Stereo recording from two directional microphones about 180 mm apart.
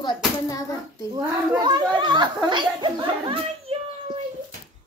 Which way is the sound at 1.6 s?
25° right (ahead or behind).